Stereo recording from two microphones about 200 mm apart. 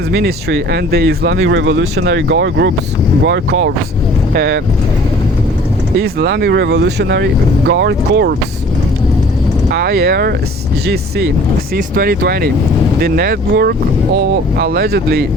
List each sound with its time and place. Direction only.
0.1 s speech: 50° right (ahead or behind)
1.4 s speech: 70° right (ahead or behind)
3.2 s speech: 80° right
4.4 s speech: 60° right (ahead or behind)
6.0 s speech: 55° right (ahead or behind)
9.6 s speech: 50° right (ahead or behind)
11.9 s speech: 50° right (ahead or behind)